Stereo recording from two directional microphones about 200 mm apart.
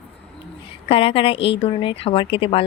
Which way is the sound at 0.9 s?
30° left (ahead or behind).